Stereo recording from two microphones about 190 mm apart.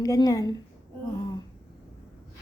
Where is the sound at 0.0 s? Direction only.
20° left (ahead or behind).